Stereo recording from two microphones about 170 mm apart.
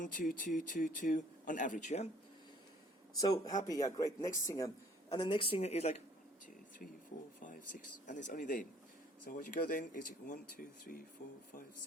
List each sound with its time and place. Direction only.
0.0 s speech: 50° left (ahead or behind)
3.2 s speech: 20° left (ahead or behind)
5.0 s speech: 30° left (ahead or behind)
8.0 s speech: 50° left (ahead or behind)